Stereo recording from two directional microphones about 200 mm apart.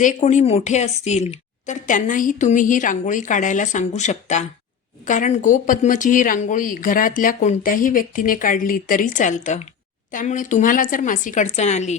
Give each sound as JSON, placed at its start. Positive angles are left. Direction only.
{"t": 0.0, "sound": "speech", "side_deg": 35}